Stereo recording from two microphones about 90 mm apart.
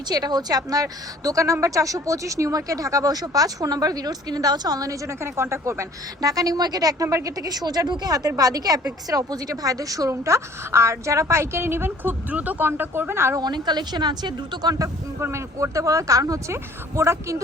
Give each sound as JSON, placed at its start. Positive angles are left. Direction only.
{"t": 0.1, "sound": "a woman's voice", "side_deg": -50}
{"t": 13.3, "sound": "a woman's voice", "side_deg": -50}
{"t": 15.2, "sound": "speech", "side_deg": -30}